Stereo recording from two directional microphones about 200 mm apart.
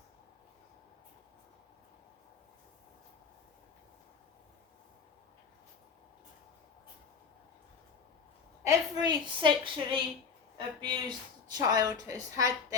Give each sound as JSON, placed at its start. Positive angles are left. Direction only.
{"t": 8.6, "sound": "a woman's voice", "side_deg": -20}